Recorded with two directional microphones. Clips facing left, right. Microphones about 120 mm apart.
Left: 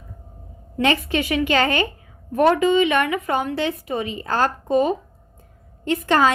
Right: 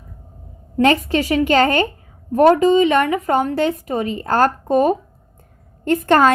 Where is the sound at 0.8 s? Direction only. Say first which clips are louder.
Right 5 dB; 40° right (ahead or behind).